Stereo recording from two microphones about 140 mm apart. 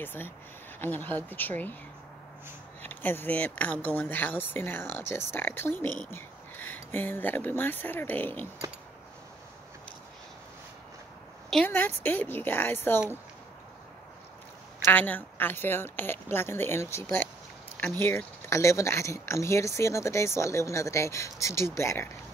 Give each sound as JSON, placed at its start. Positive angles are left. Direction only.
{"t": 0.0, "sound": "speech", "side_deg": 15}
{"t": 2.9, "sound": "speech", "side_deg": 15}
{"t": 11.6, "sound": "speech", "side_deg": 15}
{"t": 14.9, "sound": "speech", "side_deg": 10}